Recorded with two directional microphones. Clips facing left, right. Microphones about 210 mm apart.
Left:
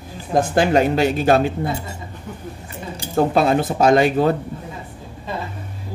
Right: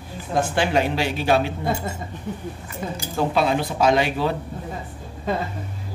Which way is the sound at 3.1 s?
50° left (ahead or behind).